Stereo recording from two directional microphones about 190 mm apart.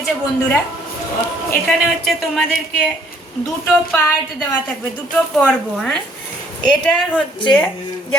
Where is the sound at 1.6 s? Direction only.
Centre (ahead or behind).